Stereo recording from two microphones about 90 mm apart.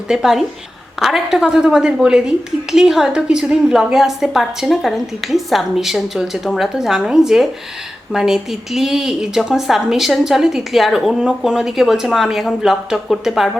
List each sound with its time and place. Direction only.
0.1 s a woman's voice: 5° right (ahead or behind)